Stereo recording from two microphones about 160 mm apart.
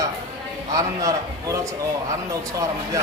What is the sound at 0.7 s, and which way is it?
Speech, 20° right (ahead or behind).